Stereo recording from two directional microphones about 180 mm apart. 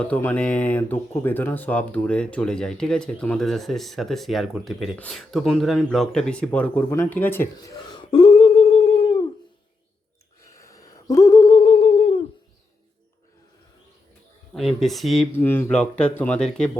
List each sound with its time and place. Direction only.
0.0 s speech: 10° left (ahead or behind); by 9.2 s 30° left (ahead or behind)
10.4 s a sound: 15° left (ahead or behind)
14.5 s speech: centre (ahead or behind)
15.4 s speech: 10° left (ahead or behind)